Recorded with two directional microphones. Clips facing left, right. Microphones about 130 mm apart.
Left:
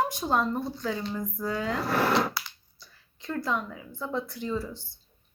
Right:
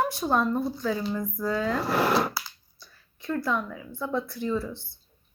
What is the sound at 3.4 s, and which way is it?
Speech, 20° left (ahead or behind).